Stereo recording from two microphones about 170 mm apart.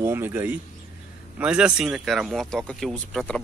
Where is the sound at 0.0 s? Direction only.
15° right (ahead or behind).